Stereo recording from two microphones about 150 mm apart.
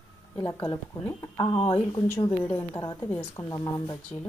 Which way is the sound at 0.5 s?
30° left (ahead or behind).